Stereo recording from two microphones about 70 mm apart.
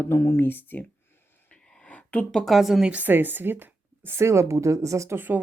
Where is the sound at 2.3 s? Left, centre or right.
Centre.